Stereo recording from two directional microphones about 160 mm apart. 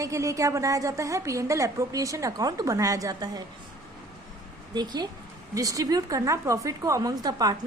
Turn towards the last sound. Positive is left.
turn(degrees=-25)  # may be behind; listen again after turning